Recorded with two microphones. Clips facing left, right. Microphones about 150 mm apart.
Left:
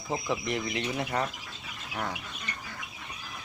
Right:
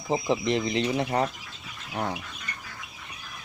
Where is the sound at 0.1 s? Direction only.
25° right (ahead or behind).